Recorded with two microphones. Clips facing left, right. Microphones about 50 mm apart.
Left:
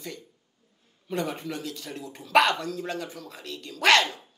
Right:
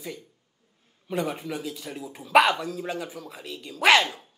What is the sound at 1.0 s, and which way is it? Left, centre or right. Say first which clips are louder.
Speech: right 1 dB; centre.